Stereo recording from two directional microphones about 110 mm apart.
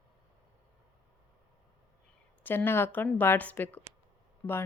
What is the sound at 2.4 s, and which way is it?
Speech, 20° left (ahead or behind).